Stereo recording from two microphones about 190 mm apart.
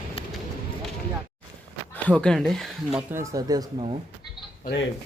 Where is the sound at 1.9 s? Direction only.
5° left (ahead or behind).